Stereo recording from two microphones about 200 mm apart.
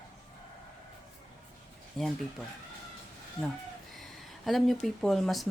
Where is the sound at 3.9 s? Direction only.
Centre (ahead or behind).